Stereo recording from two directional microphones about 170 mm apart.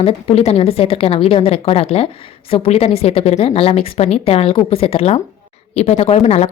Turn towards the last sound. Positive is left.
turn(degrees=40)  # may be behind; listen again after turning